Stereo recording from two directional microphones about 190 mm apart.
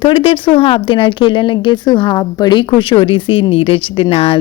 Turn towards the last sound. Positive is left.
turn(degrees=30)  # may be behind; listen again after turning